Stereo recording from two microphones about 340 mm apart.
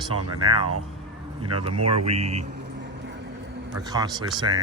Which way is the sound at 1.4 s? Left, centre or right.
Centre.